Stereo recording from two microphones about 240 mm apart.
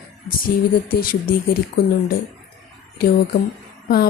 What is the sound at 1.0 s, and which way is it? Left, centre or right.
Speech, left.